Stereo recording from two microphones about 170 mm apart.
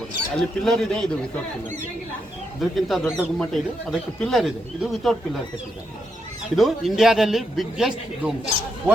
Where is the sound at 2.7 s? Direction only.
Centre (ahead or behind).